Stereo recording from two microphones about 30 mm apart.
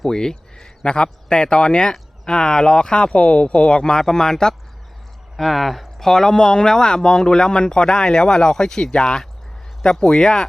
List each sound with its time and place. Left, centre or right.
0.0 s speech: left
5.4 s speech: centre
6.1 s speech: centre